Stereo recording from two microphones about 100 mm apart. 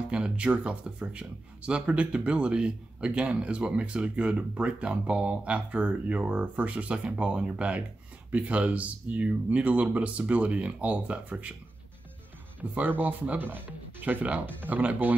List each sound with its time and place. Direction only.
0.1 s speech: 10° right (ahead or behind)
12.7 s speech: 20° right (ahead or behind)